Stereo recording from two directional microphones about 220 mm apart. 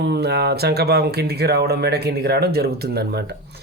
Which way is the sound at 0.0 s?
50° right (ahead or behind).